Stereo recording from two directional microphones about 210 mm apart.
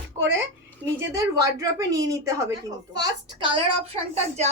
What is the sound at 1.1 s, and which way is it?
A woman's voice, 15° right (ahead or behind).